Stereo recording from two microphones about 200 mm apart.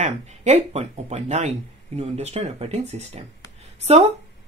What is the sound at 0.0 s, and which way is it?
Speech, 35° right (ahead or behind).